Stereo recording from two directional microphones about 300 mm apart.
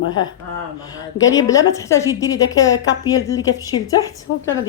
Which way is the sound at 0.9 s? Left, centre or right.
Centre.